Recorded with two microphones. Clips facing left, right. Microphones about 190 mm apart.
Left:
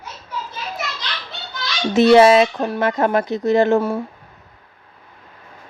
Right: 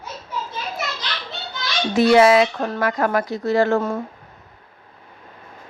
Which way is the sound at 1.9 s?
25° left (ahead or behind).